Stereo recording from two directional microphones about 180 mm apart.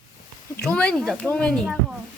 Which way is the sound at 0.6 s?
5° left (ahead or behind).